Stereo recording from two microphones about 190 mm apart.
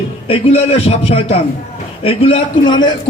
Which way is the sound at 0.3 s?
30° left (ahead or behind).